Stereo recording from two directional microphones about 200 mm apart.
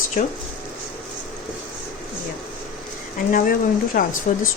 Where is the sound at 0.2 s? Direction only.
40° left (ahead or behind).